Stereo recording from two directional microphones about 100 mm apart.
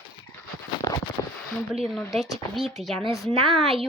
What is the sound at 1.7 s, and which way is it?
Speech, centre (ahead or behind).